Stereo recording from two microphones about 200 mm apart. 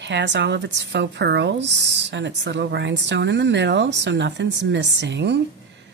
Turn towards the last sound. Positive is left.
turn(degrees=-60)  # may be behind; listen again after turning